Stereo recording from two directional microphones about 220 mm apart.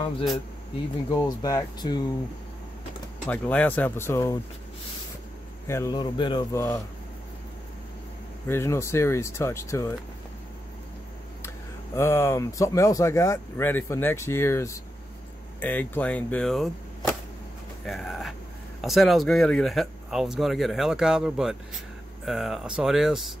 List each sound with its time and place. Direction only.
1.1 s speech: 15° left (ahead or behind)
3.3 s speech: 5° left (ahead or behind)
5.7 s speech: 15° left (ahead or behind)
8.5 s speech: 10° left (ahead or behind)
11.4 s speech: 10° left (ahead or behind)
15.6 s arrow: 10° left (ahead or behind)
17.8 s speech: centre (ahead or behind)